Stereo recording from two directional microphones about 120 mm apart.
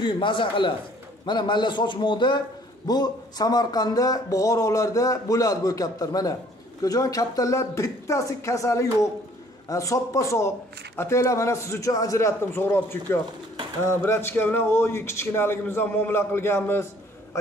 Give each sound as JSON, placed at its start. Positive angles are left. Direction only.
{"t": 0.0, "sound": "a man's voice", "side_deg": 45}